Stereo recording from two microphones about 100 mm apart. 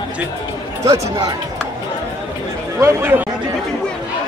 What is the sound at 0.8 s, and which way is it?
Speech, 35° right (ahead or behind).